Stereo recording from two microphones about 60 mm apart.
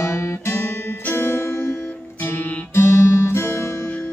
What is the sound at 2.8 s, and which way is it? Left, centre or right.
Music, left.